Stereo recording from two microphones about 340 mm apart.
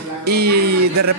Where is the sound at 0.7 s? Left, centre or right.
Right.